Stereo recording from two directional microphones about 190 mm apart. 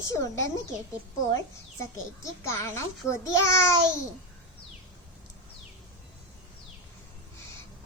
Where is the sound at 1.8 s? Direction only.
15° left (ahead or behind).